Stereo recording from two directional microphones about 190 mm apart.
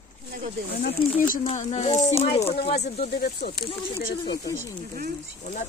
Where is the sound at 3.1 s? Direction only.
55° left (ahead or behind).